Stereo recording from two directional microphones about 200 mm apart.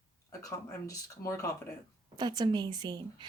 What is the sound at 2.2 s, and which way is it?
Speech, 20° right (ahead or behind).